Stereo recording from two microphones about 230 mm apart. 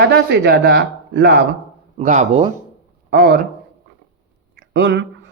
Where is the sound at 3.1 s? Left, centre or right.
Right.